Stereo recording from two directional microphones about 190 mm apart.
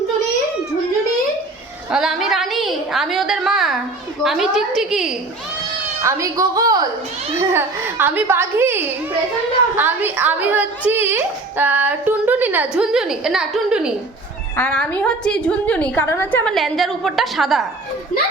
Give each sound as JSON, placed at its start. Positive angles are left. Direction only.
{"t": 1.9, "sound": "a sound", "side_deg": 0}
{"t": 4.2, "sound": "a woman's voice", "side_deg": 0}
{"t": 6.0, "sound": "a woman's voice", "side_deg": -15}
{"t": 14.5, "sound": "a woman's voice", "side_deg": 5}